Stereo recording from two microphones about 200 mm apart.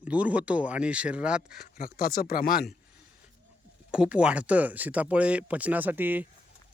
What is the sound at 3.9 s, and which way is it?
Speech, 5° right (ahead or behind).